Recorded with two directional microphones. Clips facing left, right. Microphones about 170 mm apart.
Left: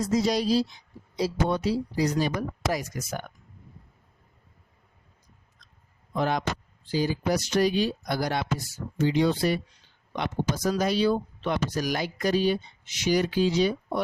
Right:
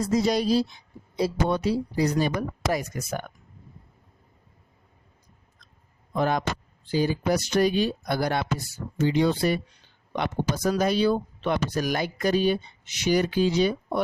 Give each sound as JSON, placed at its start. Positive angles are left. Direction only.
{"t": 0.0, "sound": "speech", "side_deg": -55}
{"t": 6.1, "sound": "speech", "side_deg": -50}